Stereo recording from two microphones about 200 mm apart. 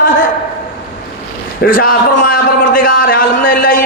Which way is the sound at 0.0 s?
40° left (ahead or behind).